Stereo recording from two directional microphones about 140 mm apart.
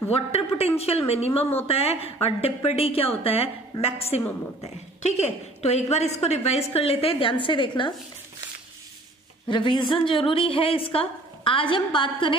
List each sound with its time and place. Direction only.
0.1 s a woman's voice: 45° left (ahead or behind)
9.5 s a woman's voice: 35° left (ahead or behind)